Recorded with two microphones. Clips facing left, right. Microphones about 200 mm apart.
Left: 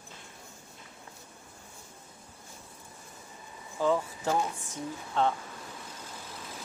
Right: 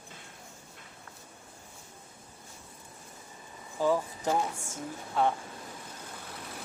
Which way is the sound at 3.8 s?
10° right (ahead or behind).